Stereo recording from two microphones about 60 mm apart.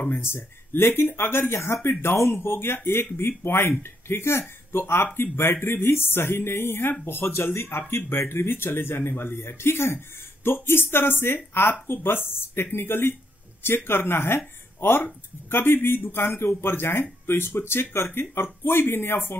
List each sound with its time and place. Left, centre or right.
0.1 s speech: left